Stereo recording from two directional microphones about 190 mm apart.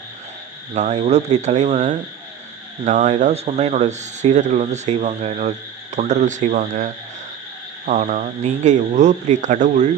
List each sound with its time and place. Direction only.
0.7 s speech: 35° right (ahead or behind)